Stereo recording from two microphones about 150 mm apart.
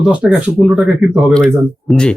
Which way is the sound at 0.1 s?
10° right (ahead or behind).